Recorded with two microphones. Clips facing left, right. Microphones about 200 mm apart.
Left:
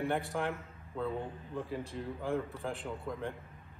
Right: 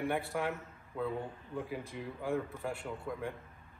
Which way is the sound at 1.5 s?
10° right (ahead or behind).